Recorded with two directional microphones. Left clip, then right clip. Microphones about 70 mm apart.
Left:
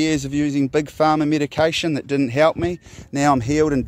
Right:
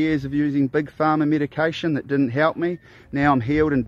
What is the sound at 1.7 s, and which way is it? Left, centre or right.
Speech, left.